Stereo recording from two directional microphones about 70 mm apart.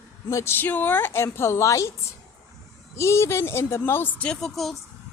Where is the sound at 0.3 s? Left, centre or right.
Left.